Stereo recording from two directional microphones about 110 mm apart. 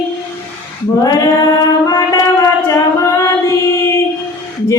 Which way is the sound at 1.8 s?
35° left (ahead or behind).